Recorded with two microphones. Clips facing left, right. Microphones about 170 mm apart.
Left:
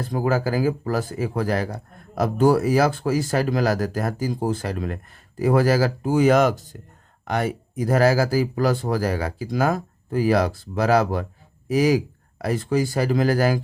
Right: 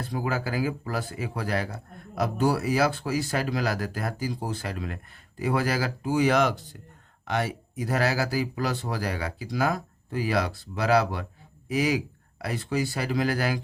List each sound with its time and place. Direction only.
0.0 s speech: 45° left (ahead or behind)